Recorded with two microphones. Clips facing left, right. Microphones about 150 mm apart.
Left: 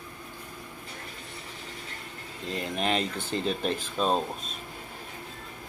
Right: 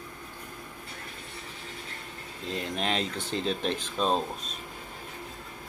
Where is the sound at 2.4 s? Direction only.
Centre (ahead or behind).